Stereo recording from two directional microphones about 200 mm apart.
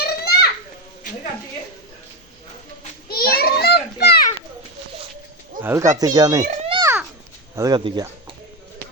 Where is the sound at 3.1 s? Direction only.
50° left (ahead or behind).